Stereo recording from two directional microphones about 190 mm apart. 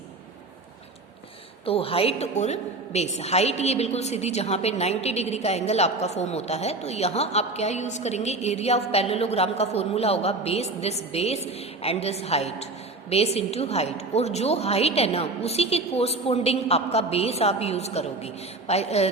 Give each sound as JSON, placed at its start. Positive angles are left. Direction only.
{"t": 1.6, "sound": "a woman's voice", "side_deg": 30}